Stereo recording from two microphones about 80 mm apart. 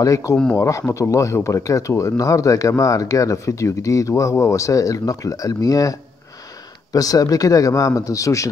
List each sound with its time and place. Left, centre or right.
0.0 s speech: left